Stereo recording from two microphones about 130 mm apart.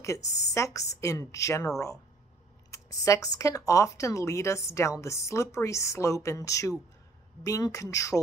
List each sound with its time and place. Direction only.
0.0 s speech: 20° left (ahead or behind)
2.7 s speech: 25° left (ahead or behind)